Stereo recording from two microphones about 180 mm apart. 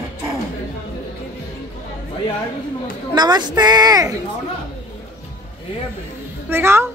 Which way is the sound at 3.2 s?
25° right (ahead or behind).